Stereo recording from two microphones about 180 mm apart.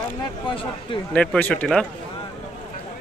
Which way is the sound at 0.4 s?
25° left (ahead or behind).